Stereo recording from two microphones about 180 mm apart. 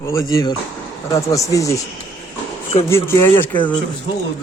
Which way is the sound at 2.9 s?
15° left (ahead or behind).